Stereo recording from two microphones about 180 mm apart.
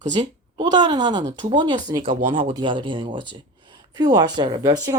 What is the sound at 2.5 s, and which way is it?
Speech, 25° right (ahead or behind).